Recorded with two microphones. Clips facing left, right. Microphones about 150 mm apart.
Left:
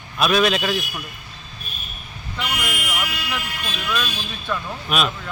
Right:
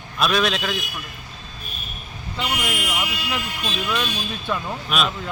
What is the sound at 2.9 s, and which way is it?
Speech, 20° right (ahead or behind).